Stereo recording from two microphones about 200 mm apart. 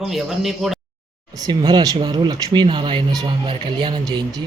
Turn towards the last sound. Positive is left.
turn(degrees=-20)  # may be behind; listen again after turning